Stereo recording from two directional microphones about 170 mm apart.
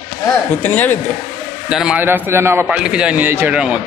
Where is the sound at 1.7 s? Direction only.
5° right (ahead or behind).